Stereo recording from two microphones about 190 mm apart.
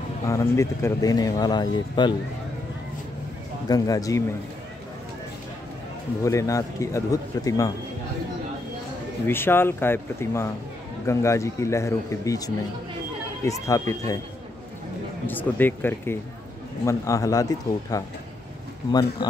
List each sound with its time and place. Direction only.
0.3 s speech: 15° left (ahead or behind)
3.6 s speech: 20° left (ahead or behind)
6.2 s speech: 15° left (ahead or behind)
9.2 s speech: 10° left (ahead or behind)
15.2 s speech: 10° left (ahead or behind)